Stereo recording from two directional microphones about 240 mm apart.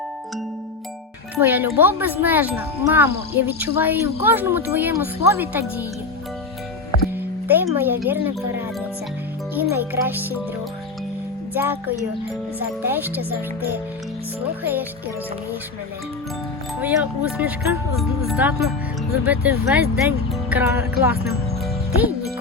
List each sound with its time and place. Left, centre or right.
1.4 s speech: centre
7.4 s speech: centre
11.5 s speech: centre
14.6 s speech: centre
16.8 s speech: centre